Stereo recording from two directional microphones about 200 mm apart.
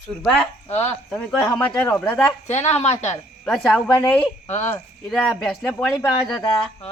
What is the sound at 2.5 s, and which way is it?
Speech, 35° left (ahead or behind).